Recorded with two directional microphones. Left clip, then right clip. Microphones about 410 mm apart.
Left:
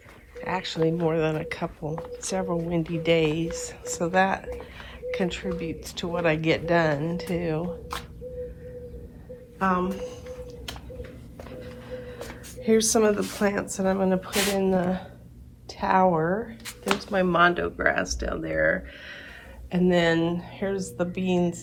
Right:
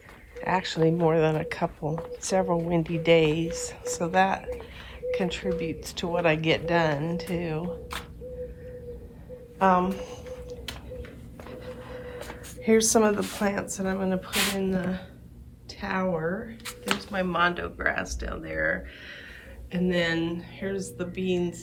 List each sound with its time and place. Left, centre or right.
0.4 s speech: centre
9.6 s speech: centre
11.6 s music: centre
12.6 s speech: centre